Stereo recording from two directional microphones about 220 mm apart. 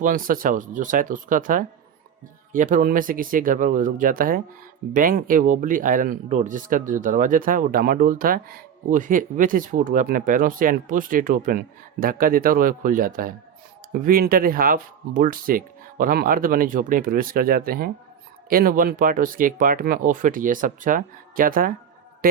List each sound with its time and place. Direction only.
0.0 s a man's voice: 40° right (ahead or behind)